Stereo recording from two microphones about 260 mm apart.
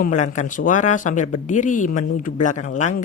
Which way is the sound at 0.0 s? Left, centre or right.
Left.